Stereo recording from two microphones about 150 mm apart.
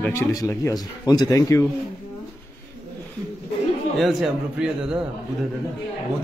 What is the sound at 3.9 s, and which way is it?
A man's voice, centre (ahead or behind).